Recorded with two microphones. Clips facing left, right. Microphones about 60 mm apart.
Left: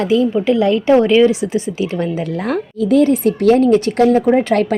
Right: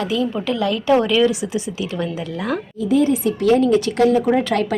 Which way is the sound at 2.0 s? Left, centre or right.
Left.